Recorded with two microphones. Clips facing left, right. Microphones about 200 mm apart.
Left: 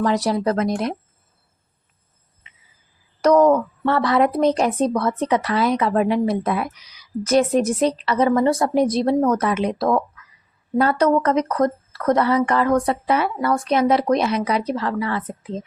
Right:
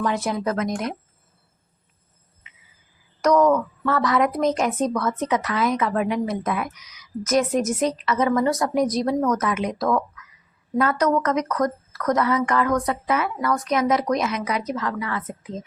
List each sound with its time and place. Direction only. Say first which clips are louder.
0.0 s a woman's voice: left 4 dB; 35° left (ahead or behind)
2.5 s cricket: even; 30° left (ahead or behind)
3.2 s a woman's voice: left 3 dB; 30° left (ahead or behind)